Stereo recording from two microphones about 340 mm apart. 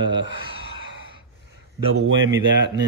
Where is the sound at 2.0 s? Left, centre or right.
Right.